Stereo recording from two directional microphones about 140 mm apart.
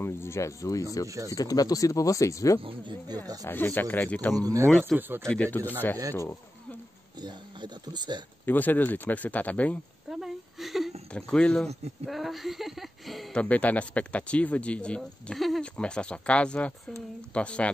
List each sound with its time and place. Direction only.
0.0 s speech: 20° left (ahead or behind)
1.0 s speech: 25° right (ahead or behind)
1.3 s speech: 25° left (ahead or behind)
2.6 s speech: 35° right (ahead or behind)
3.4 s speech: 15° left (ahead or behind)
4.4 s speech: 25° right (ahead or behind)
4.6 s speech: 5° left (ahead or behind)
7.2 s speech: 30° right (ahead or behind)
8.5 s speech: 10° left (ahead or behind)
10.0 s whimper: 5° right (ahead or behind)
11.1 s speech: 5° left (ahead or behind)